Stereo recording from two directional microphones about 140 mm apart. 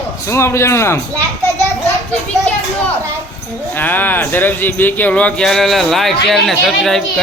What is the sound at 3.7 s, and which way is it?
Speech, 15° left (ahead or behind).